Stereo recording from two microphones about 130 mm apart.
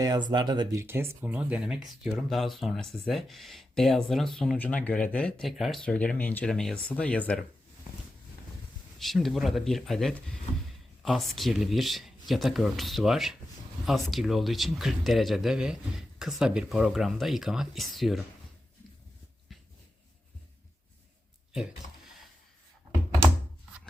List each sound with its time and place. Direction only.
0.0 s speech: 30° right (ahead or behind)
0.8 s speech: 20° right (ahead or behind); by 7.3 s 10° left (ahead or behind)
9.0 s speech: centre (ahead or behind)